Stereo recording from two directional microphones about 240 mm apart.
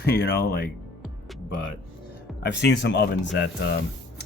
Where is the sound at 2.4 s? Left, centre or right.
Left.